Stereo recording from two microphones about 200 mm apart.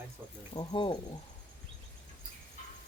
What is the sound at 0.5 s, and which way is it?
Speech, 25° left (ahead or behind).